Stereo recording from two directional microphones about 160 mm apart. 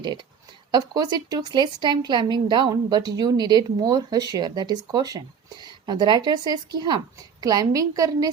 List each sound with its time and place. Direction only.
0.7 s a woman's voice: 25° right (ahead or behind)